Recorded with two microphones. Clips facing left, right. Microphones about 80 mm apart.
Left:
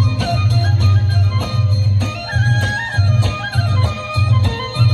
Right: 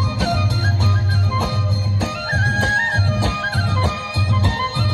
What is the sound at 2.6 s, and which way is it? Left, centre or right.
Music, right.